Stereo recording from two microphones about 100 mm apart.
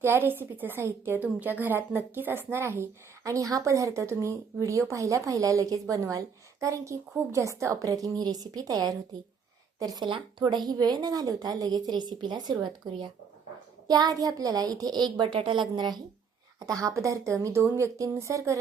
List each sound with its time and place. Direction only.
0.0 s a woman's voice: 25° right (ahead or behind); by 12.5 s 45° right (ahead or behind)
13.8 s a woman's voice: 40° right (ahead or behind)
15.2 s speech: 55° right (ahead or behind)
16.6 s a woman's voice: 35° right (ahead or behind)